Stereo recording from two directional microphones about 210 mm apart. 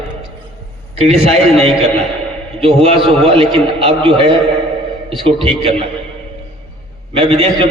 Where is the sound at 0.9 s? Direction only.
30° right (ahead or behind).